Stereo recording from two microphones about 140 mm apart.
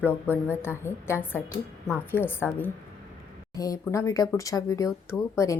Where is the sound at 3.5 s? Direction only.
25° left (ahead or behind).